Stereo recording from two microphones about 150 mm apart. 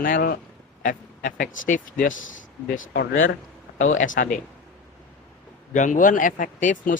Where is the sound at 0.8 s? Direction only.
65° left (ahead or behind).